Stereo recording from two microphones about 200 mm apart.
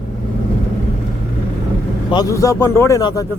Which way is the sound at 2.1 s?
15° left (ahead or behind).